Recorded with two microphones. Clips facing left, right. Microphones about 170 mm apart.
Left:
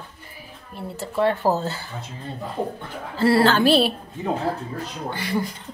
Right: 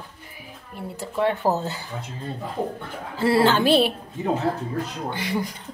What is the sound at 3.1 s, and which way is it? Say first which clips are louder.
Speech: left 1 dB; 15° right (ahead or behind).